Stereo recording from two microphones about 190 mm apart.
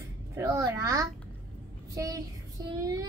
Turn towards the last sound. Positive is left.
turn(degrees=-20)  # may be behind; listen again after turning